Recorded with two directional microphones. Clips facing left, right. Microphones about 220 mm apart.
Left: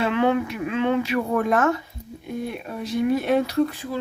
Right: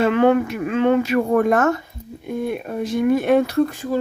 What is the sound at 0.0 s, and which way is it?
Speech, 45° right (ahead or behind).